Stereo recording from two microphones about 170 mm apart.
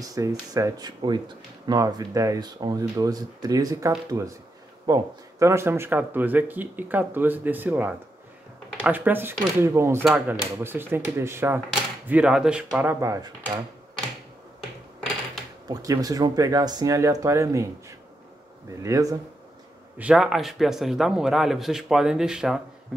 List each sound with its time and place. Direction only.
0.0 s speech: 20° right (ahead or behind)
15.7 s speech: 20° right (ahead or behind)
20.0 s a man's voice: 5° right (ahead or behind)